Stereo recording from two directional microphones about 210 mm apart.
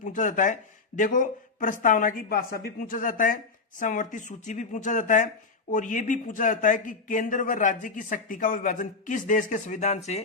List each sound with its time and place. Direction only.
0.0 s a man's voice: 35° left (ahead or behind)